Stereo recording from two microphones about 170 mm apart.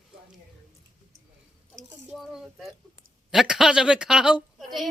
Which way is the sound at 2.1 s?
Centre (ahead or behind).